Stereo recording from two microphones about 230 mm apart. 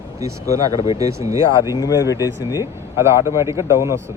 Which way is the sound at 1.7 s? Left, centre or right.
Centre.